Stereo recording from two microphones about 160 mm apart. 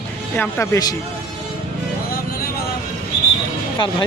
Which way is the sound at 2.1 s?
70° left (ahead or behind).